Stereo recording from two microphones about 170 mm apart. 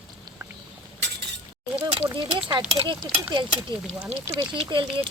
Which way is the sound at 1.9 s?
35° right (ahead or behind).